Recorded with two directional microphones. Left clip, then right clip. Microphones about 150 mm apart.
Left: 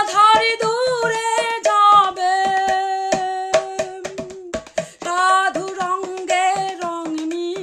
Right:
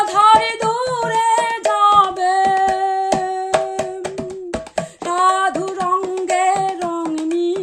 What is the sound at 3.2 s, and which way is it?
Music, 25° left (ahead or behind).